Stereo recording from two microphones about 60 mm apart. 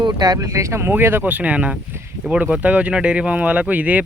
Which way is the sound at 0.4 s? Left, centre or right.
Right.